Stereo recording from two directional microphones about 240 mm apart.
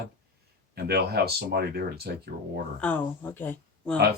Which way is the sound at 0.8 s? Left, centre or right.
Right.